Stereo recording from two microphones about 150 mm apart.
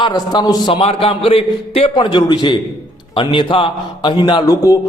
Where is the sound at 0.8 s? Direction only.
40° left (ahead or behind).